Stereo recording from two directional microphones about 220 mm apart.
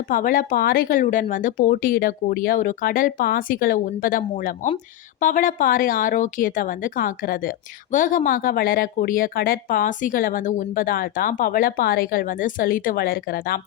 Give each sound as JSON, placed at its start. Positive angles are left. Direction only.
{"t": 0.1, "sound": "speech", "side_deg": 40}